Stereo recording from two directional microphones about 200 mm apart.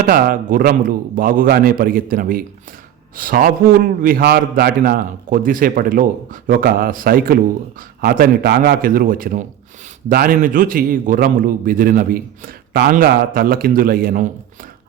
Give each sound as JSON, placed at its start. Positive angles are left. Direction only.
{"t": 0.0, "sound": "a man's voice", "side_deg": -45}